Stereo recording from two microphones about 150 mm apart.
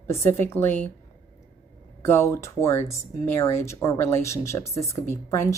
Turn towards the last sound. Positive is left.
turn(degrees=20)  # may be behind; listen again after turning